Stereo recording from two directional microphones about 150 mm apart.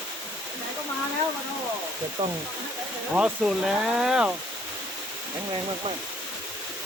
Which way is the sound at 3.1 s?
5° right (ahead or behind).